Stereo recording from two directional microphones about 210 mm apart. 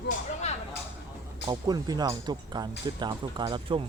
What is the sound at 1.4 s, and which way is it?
Speech, 20° right (ahead or behind).